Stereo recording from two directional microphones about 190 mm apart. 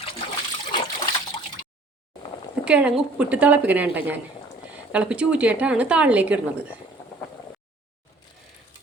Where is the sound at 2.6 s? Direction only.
5° right (ahead or behind).